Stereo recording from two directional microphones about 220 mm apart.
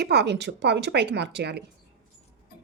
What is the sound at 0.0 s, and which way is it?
A woman's voice, 50° right (ahead or behind).